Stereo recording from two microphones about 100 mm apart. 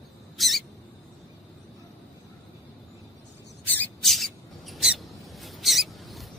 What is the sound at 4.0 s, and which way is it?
Mouse, centre (ahead or behind).